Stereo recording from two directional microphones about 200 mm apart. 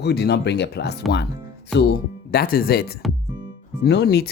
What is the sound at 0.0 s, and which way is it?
Speech, 55° left (ahead or behind).